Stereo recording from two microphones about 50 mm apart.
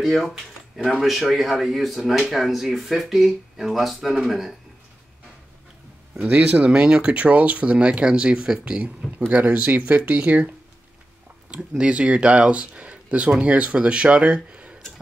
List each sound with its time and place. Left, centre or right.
0.0 s speech: centre
6.3 s speech: right
9.3 s speech: right
11.8 s speech: right